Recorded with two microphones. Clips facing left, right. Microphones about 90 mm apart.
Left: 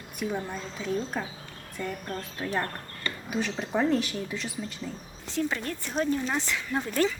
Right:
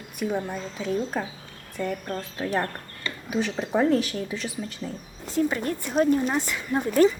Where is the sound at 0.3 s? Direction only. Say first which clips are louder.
Right 4 dB; 15° right (ahead or behind).